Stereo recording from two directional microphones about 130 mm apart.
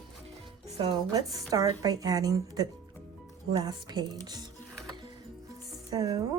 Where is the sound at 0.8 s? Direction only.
35° right (ahead or behind).